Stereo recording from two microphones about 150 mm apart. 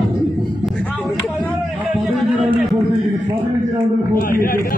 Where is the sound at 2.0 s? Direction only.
Centre (ahead or behind).